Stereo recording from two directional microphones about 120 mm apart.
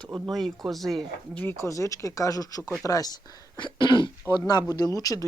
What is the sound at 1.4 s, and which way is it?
Speech, 20° left (ahead or behind).